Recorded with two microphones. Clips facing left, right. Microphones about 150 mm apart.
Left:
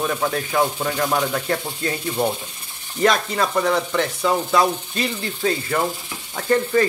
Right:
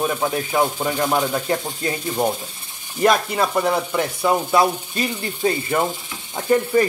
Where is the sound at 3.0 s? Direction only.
10° right (ahead or behind).